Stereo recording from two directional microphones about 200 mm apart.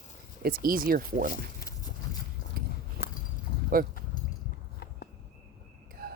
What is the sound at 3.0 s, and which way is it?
Walk, 50° left (ahead or behind).